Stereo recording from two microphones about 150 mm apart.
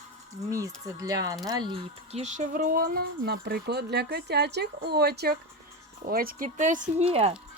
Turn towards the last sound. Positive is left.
turn(degrees=-40)  # may be behind; listen again after turning